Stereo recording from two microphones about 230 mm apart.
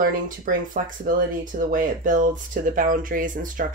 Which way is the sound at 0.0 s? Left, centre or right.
Right.